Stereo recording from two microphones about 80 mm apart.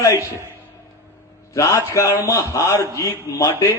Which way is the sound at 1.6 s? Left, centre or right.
Left.